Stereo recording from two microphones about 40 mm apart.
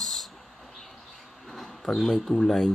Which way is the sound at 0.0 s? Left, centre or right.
Centre.